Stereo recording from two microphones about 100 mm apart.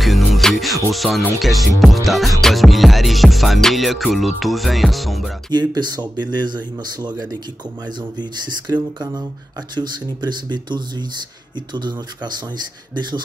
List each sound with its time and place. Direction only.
0.0 s music: centre (ahead or behind)
5.5 s speech: 45° right (ahead or behind)